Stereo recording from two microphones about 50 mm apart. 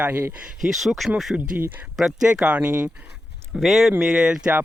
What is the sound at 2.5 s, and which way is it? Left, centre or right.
Speech, right.